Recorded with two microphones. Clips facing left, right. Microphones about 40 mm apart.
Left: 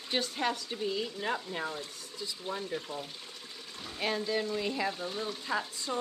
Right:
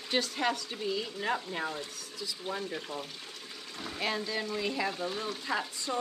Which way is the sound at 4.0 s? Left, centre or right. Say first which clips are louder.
Left 2 dB; right.